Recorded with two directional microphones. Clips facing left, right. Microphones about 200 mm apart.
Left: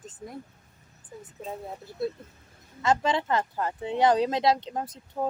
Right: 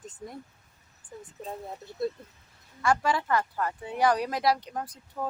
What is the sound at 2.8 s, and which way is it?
Speech, 20° left (ahead or behind).